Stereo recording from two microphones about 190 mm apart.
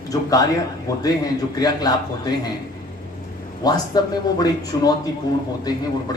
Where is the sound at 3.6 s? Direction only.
20° left (ahead or behind).